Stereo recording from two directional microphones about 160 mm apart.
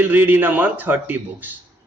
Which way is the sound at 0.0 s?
10° right (ahead or behind).